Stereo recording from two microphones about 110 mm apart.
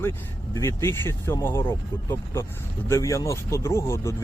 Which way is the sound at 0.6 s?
25° left (ahead or behind).